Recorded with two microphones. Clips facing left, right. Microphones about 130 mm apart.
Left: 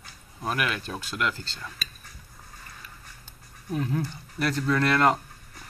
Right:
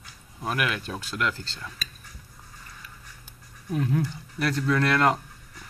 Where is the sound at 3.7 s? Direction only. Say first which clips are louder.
Right 2 dB; centre (ahead or behind).